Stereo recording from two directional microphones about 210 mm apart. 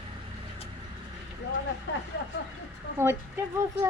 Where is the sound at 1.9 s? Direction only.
55° left (ahead or behind).